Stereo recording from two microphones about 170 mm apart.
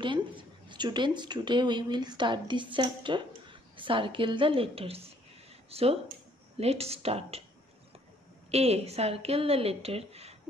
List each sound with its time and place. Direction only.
0.0 s a woman's voice: 30° right (ahead or behind)
8.5 s a woman's voice: 40° right (ahead or behind)